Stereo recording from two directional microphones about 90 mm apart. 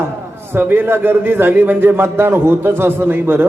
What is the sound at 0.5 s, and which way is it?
A man's voice, 20° right (ahead or behind).